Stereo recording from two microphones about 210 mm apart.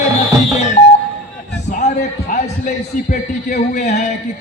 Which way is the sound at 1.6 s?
35° left (ahead or behind).